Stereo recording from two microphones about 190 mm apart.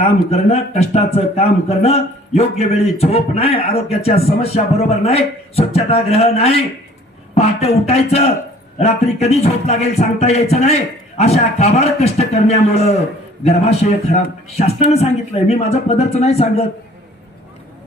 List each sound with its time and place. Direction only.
0.3 s a man's voice: 35° left (ahead or behind)